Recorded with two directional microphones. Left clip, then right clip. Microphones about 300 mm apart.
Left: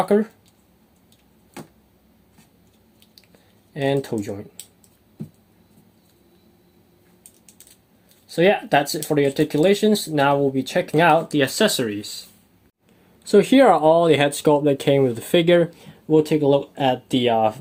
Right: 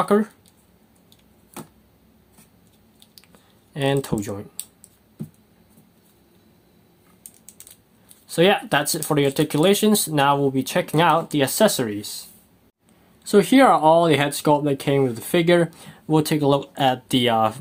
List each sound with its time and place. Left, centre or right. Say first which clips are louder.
0.0 s speech: left 1 dB; centre
3.8 s speech: even; centre
8.3 s speech: left 1 dB; centre
13.2 s speech: left 1 dB; centre